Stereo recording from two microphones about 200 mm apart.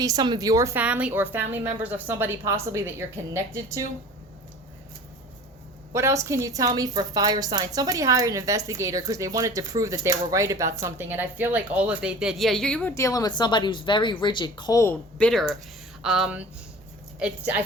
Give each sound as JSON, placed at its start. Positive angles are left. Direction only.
{"t": 0.0, "sound": "a woman's voice", "side_deg": -20}
{"t": 5.9, "sound": "a woman's voice", "side_deg": -15}
{"t": 15.3, "sound": "speech", "side_deg": 0}